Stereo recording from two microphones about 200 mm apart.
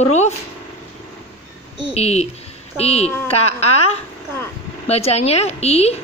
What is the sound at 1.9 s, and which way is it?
A woman's voice, 30° left (ahead or behind).